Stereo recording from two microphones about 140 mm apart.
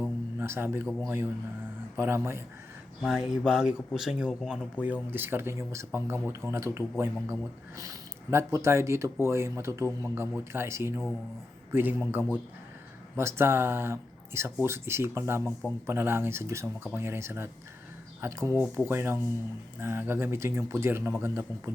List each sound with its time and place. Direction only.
0.0 s a sound: 15° right (ahead or behind)
1.0 s speech: 15° right (ahead or behind)
3.0 s a man's voice: 5° right (ahead or behind); by 21.7 s 20° right (ahead or behind)